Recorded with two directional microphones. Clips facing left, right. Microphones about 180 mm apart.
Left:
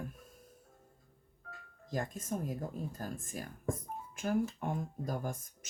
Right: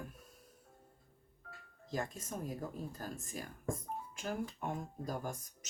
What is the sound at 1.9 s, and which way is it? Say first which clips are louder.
Speech: left 3 dB; 50° left (ahead or behind).